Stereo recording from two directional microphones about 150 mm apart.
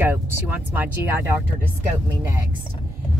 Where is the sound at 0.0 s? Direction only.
10° right (ahead or behind).